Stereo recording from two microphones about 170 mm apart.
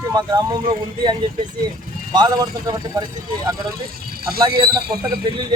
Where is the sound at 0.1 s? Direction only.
25° right (ahead or behind).